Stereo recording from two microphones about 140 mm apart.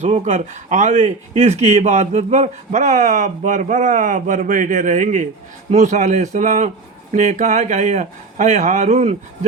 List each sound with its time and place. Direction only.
0.0 s speech: 50° right (ahead or behind)